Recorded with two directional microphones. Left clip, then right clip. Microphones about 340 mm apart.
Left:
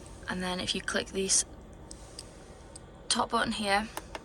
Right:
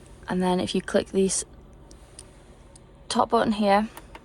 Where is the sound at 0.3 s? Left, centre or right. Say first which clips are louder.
Right 7 dB; centre.